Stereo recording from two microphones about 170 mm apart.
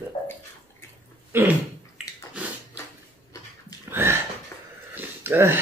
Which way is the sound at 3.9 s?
15° right (ahead or behind).